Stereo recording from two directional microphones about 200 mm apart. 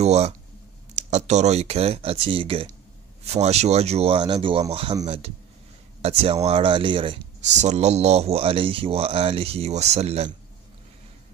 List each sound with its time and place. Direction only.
0.0 s speech: 30° right (ahead or behind)